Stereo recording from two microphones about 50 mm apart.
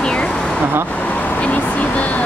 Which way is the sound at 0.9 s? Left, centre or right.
Left.